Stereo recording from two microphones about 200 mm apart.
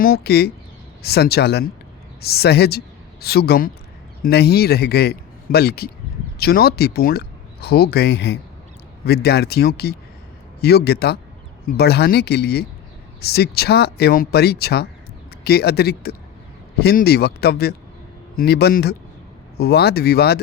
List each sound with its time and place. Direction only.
0.0 s a woman's voice: 50° left (ahead or behind)